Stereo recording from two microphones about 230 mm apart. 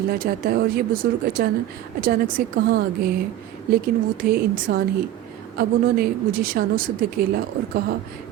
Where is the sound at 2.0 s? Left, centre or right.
Right.